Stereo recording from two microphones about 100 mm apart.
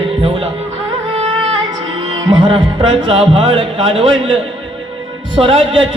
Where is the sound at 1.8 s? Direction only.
55° right (ahead or behind).